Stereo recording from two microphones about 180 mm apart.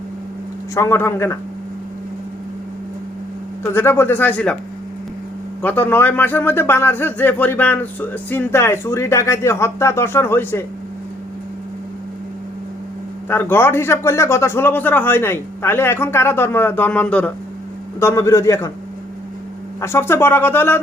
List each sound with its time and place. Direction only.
0.7 s speech: 15° left (ahead or behind)
3.6 s speech: 15° left (ahead or behind)
5.6 s speech: 10° left (ahead or behind)
13.2 s speech: 10° left (ahead or behind)
19.8 s speech: 15° left (ahead or behind)